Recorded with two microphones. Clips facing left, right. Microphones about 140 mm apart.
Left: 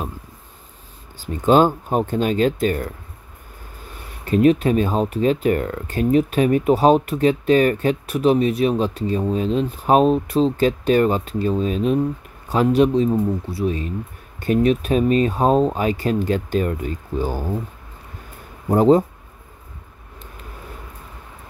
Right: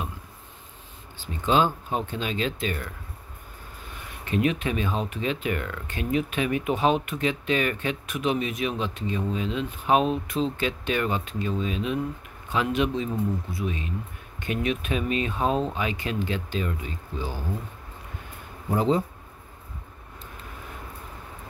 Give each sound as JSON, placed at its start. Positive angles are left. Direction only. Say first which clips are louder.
{"t": 1.2, "sound": "speech", "louder": "left 8 dB", "side_deg": 45}
{"t": 4.2, "sound": "speech", "louder": "left 10 dB", "side_deg": 40}
{"t": 18.7, "sound": "speech", "louder": "left 9 dB", "side_deg": 45}